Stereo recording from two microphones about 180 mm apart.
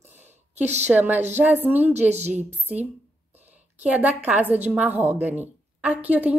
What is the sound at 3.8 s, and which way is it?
A woman's voice, 10° right (ahead or behind).